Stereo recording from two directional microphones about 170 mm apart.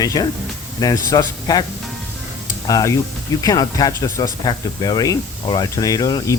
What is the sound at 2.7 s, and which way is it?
Speech, 20° left (ahead or behind).